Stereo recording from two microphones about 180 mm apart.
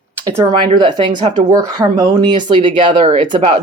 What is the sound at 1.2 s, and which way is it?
Speech, 40° right (ahead or behind).